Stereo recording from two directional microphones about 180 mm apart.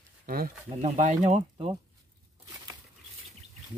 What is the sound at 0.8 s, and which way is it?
Speech, 40° right (ahead or behind).